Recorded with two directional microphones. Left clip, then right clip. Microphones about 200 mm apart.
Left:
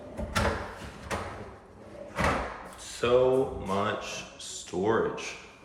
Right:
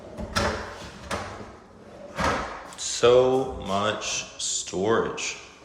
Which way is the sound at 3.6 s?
5° right (ahead or behind).